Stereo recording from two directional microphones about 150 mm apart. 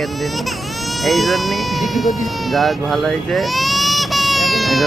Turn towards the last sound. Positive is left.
turn(degrees=0)  # may be behind; listen again after turning